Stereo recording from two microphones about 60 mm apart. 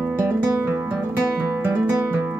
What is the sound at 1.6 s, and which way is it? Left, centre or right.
Guitar, right.